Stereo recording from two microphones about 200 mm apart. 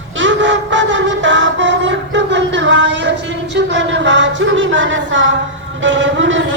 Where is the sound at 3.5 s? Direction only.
65° right (ahead or behind).